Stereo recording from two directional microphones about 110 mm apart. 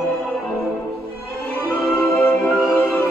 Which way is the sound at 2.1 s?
20° left (ahead or behind).